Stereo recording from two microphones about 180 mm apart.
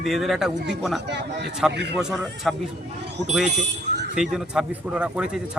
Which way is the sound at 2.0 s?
5° right (ahead or behind).